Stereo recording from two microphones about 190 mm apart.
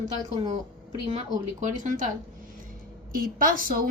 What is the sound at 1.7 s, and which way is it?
Speech, 40° right (ahead or behind).